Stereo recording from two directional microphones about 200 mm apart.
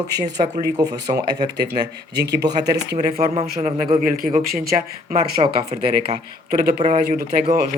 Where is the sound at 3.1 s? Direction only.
35° right (ahead or behind).